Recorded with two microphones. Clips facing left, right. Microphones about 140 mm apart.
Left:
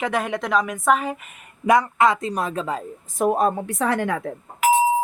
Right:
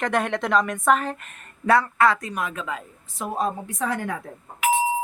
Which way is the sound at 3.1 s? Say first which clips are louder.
Left 7 dB; 55° left (ahead or behind).